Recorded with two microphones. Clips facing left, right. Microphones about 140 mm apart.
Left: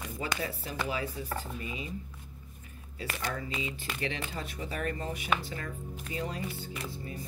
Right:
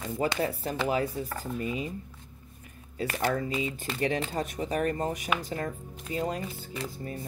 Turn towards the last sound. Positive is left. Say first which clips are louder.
# right 3 dB
turn(degrees=-35)  # may be behind; listen again after turning